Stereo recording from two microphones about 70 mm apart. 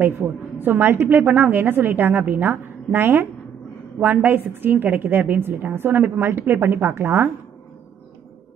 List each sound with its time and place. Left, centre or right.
0.2 s a woman's voice: right